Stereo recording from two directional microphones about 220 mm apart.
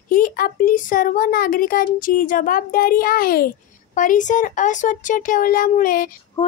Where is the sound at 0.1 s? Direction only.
40° left (ahead or behind).